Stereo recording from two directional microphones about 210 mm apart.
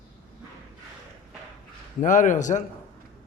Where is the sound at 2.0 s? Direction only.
35° left (ahead or behind).